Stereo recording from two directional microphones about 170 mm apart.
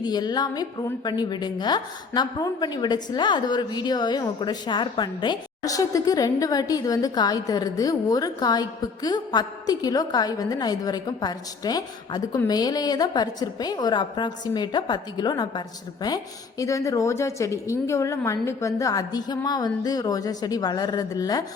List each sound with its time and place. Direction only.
0.0 s a woman's voice: 25° left (ahead or behind)